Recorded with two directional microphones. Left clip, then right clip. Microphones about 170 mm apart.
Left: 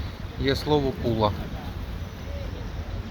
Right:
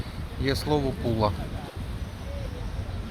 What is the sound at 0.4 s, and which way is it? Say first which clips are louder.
Speech: left 3 dB; centre (ahead or behind).